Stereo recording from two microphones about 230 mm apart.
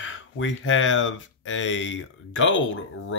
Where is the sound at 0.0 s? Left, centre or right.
Left.